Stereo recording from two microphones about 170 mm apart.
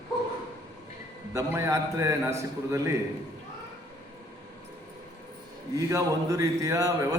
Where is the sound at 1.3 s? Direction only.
15° right (ahead or behind).